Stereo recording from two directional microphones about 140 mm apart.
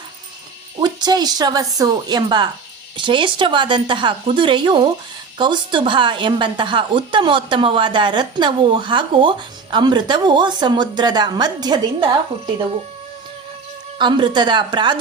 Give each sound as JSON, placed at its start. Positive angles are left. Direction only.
{"t": 0.8, "sound": "a woman's voice", "side_deg": -30}
{"t": 14.0, "sound": "a woman's voice", "side_deg": -35}